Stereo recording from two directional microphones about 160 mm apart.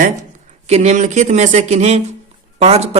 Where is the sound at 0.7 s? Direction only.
45° right (ahead or behind).